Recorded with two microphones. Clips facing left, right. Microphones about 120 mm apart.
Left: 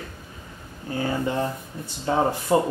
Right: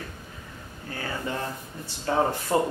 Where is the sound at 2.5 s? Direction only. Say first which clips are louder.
Left 4 dB; 15° left (ahead or behind).